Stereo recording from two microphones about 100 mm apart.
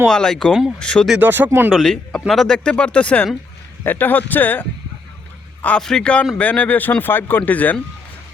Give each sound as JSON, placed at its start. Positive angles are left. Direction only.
{"t": 0.1, "sound": "speech", "side_deg": 5}
{"t": 1.2, "sound": "speech", "side_deg": -20}
{"t": 1.7, "sound": "speech", "side_deg": 5}
{"t": 5.6, "sound": "speech", "side_deg": 10}